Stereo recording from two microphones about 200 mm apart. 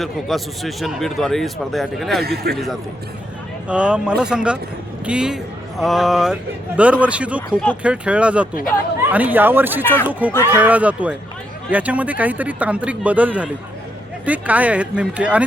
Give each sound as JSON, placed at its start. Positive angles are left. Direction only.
{"t": 0.0, "sound": "a man's voice", "side_deg": 0}
{"t": 2.2, "sound": "a man's voice", "side_deg": -50}
{"t": 3.7, "sound": "a man's voice", "side_deg": -5}